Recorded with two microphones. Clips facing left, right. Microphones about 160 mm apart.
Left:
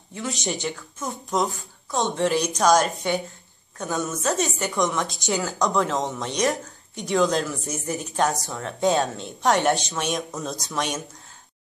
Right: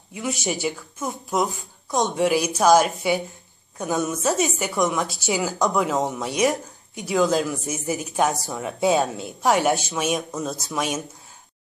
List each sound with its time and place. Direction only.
0.3 s speech: 5° right (ahead or behind)
3.7 s a woman's voice: 20° right (ahead or behind)